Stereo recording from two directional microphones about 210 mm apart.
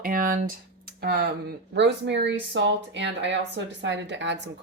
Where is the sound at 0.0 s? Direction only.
40° right (ahead or behind).